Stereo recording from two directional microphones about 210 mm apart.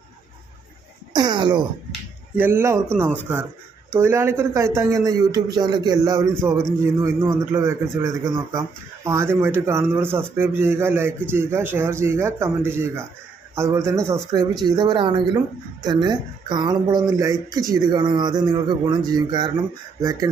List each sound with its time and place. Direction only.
1.1 s speech: 20° right (ahead or behind)
2.3 s a man's voice: 10° right (ahead or behind)